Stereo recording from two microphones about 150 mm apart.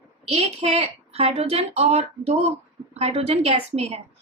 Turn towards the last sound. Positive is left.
turn(degrees=-45)  # may be behind; listen again after turning